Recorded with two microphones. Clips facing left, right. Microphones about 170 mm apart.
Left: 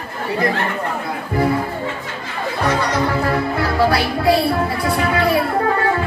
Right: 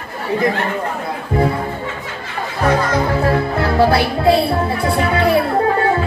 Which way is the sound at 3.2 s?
25° right (ahead or behind).